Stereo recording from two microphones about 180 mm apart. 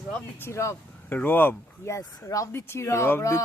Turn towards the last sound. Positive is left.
turn(degrees=15)  # may be behind; listen again after turning